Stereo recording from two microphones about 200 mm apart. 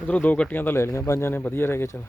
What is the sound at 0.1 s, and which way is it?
Speech, 10° left (ahead or behind).